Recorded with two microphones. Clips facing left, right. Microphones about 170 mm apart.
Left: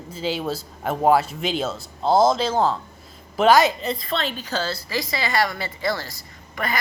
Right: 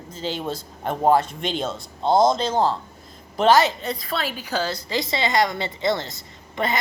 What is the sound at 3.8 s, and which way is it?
A woman's voice, centre (ahead or behind).